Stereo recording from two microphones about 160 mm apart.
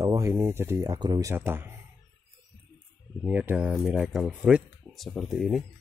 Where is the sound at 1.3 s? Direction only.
15° right (ahead or behind).